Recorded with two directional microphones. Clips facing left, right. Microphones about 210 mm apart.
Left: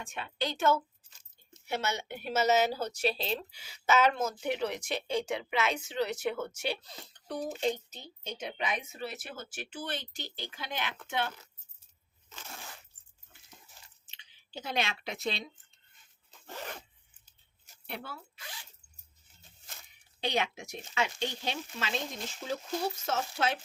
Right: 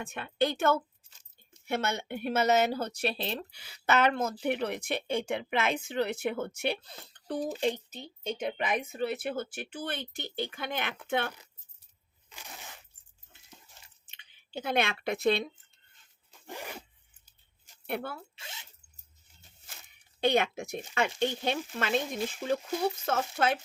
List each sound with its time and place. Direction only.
0.0 s a woman's voice: 55° right (ahead or behind)
12.3 s a sound: 15° right (ahead or behind)
14.1 s speech: 55° right (ahead or behind)
16.5 s zipper: 10° right (ahead or behind)
17.8 s a woman's voice: 55° right (ahead or behind)
18.3 s zipper: 25° right (ahead or behind)
20.2 s a woman's voice: 55° right (ahead or behind)